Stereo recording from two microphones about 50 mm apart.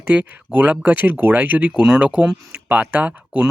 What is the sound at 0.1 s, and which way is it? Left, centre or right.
Speech, right.